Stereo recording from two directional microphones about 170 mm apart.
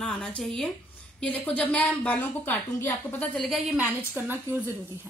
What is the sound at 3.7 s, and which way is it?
Speech, 10° right (ahead or behind).